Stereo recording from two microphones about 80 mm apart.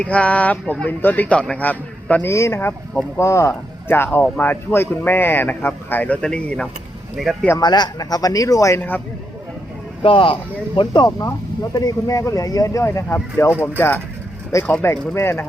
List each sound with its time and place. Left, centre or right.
0.0 s speech: centre
2.2 s speech: left
3.2 s speech: left
3.5 s speech: left
6.2 s speech: centre
7.2 s speech: centre
7.6 s a man's voice: left
10.1 s speech: left
10.8 s speech: left
11.7 s a man's voice: left
12.8 s speech: left
14.5 s a man's voice: left